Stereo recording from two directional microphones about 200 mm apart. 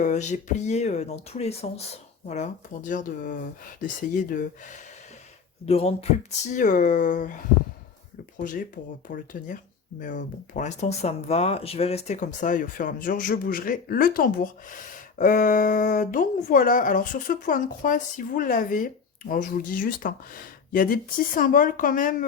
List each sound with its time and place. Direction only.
0.0 s speech: 35° left (ahead or behind)
5.6 s speech: 30° left (ahead or behind)